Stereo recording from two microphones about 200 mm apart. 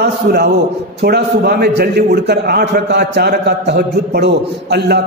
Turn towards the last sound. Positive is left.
turn(degrees=-55)  # may be behind; listen again after turning